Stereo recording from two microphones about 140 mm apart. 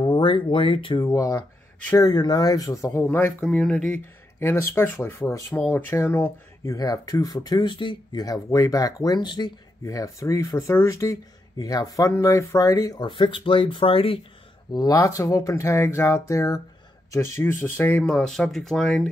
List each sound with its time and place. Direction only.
0.0 s speech: 35° left (ahead or behind)
1.0 s speech: 25° left (ahead or behind); by 4.0 s 5° left (ahead or behind)
4.4 s speech: 20° left (ahead or behind)
6.6 s speech: 25° left (ahead or behind); by 14.2 s 40° left (ahead or behind)
14.7 s speech: 25° left (ahead or behind); by 19.0 s 5° left (ahead or behind)